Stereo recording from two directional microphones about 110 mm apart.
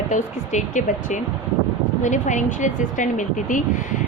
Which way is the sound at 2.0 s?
90° left.